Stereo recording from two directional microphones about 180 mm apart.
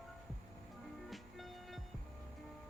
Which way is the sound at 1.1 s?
Centre (ahead or behind).